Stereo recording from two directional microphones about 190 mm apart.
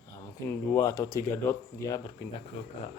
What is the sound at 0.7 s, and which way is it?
Speech, 15° left (ahead or behind).